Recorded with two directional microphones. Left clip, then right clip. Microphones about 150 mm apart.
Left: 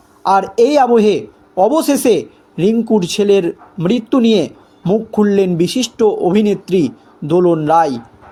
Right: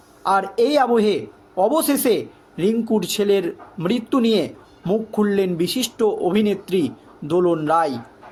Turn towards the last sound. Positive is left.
turn(degrees=35)  # may be behind; listen again after turning